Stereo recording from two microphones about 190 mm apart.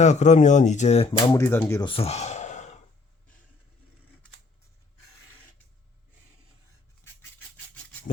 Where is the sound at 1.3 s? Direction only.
15° left (ahead or behind).